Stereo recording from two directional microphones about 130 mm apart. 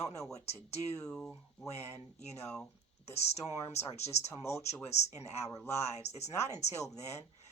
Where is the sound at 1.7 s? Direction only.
55° left (ahead or behind).